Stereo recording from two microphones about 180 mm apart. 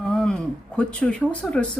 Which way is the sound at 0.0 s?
Centre (ahead or behind).